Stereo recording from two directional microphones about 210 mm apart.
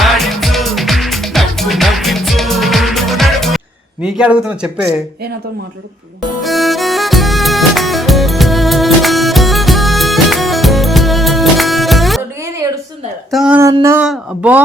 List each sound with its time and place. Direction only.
0.0 s music: centre (ahead or behind)
4.0 s speech: 5° right (ahead or behind)
6.4 s music: centre (ahead or behind)
13.3 s a sound: 5° right (ahead or behind)